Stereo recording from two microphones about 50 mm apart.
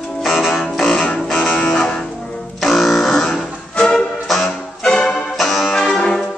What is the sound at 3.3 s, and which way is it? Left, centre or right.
Music, left.